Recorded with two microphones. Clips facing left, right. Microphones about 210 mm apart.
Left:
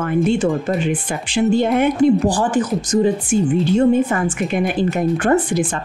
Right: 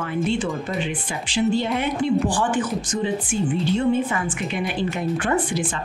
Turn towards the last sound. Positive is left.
turn(degrees=45)  # may be behind; listen again after turning